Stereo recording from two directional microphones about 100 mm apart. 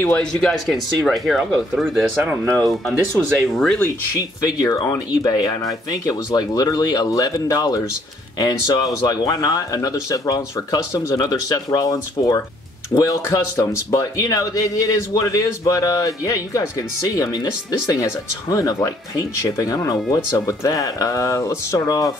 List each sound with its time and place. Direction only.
0.4 s speech: centre (ahead or behind)
2.1 s speech: 15° right (ahead or behind)
3.3 s speech: centre (ahead or behind)
4.6 s speech: 40° left (ahead or behind)